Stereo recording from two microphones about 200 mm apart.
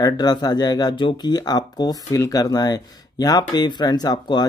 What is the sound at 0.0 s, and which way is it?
Speech, 20° left (ahead or behind).